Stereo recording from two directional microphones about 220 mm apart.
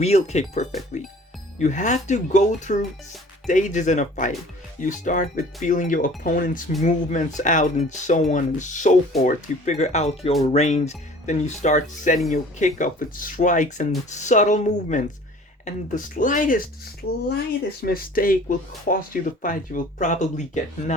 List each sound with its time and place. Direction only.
0.0 s speech: 30° left (ahead or behind)